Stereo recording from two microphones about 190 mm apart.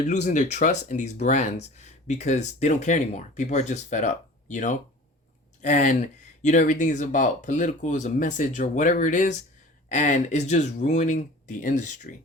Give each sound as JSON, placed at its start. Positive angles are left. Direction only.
{"t": 0.1, "sound": "speech", "side_deg": 40}